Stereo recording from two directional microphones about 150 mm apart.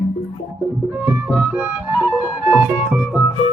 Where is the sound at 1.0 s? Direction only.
10° right (ahead or behind).